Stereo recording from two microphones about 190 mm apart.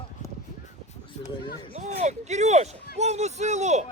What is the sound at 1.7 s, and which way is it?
Speech, 35° right (ahead or behind).